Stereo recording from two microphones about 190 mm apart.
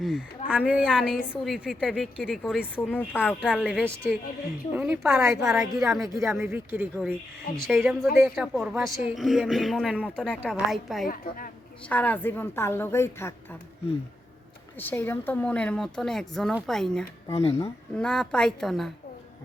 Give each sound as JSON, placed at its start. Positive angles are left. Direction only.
{"t": 0.0, "sound": "speech", "side_deg": 0}
{"t": 2.9, "sound": "a woman's voice", "side_deg": 10}
{"t": 4.7, "sound": "speech", "side_deg": -10}
{"t": 6.1, "sound": "speech", "side_deg": -15}
{"t": 7.5, "sound": "speech", "side_deg": 0}
{"t": 11.1, "sound": "a woman's voice", "side_deg": 45}
{"t": 11.9, "sound": "a woman's voice", "side_deg": 10}
{"t": 14.8, "sound": "speech", "side_deg": 10}
{"t": 17.3, "sound": "speech", "side_deg": 35}
{"t": 17.9, "sound": "speech", "side_deg": 5}